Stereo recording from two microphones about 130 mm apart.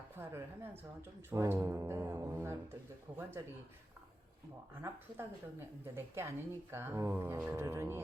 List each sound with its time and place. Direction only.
0.2 s a woman's voice: 20° right (ahead or behind)
4.8 s a woman's voice: 15° right (ahead or behind)